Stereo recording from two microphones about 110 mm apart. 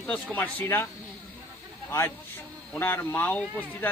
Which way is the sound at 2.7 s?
20° left (ahead or behind).